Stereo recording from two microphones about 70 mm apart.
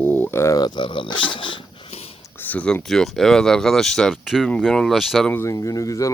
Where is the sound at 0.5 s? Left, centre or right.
Left.